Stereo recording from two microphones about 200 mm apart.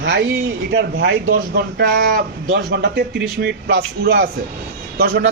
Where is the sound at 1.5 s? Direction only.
50° right (ahead or behind).